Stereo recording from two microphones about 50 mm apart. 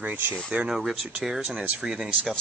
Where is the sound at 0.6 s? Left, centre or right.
Centre.